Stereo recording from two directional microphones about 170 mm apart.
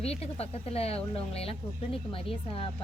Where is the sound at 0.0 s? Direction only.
35° left (ahead or behind).